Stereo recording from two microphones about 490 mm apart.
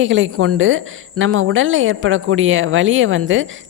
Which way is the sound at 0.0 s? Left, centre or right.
Right.